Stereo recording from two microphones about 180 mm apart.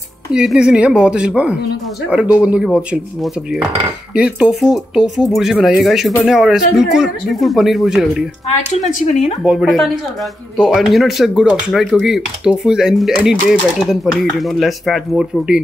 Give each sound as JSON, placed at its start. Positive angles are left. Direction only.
{"t": 0.3, "sound": "speech", "side_deg": -5}
{"t": 9.0, "sound": "speech", "side_deg": 40}
{"t": 9.4, "sound": "speech", "side_deg": -5}